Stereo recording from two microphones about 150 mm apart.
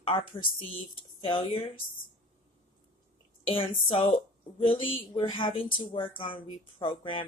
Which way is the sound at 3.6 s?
35° left (ahead or behind).